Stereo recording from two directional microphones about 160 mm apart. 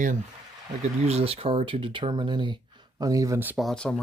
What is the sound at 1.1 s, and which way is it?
Speech, 40° right (ahead or behind).